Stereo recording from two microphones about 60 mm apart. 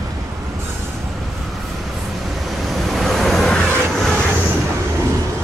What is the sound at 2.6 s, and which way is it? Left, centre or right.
Vehicle, centre.